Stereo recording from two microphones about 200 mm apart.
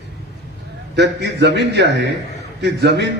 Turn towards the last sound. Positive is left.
turn(degrees=-60)  # may be behind; listen again after turning